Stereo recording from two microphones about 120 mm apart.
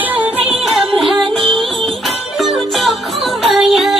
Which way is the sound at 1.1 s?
45° right (ahead or behind).